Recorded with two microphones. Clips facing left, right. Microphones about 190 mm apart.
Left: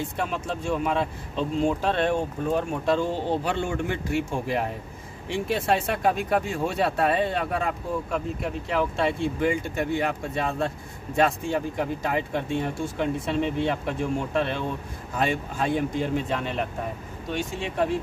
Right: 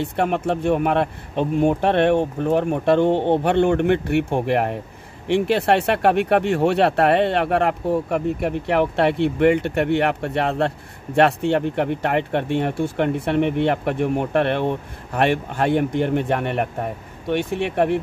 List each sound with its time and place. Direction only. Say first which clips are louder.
0.0 s speech: right 8 dB; 65° right (ahead or behind)